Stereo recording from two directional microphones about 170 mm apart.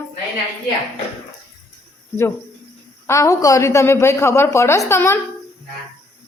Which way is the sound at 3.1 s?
20° left (ahead or behind).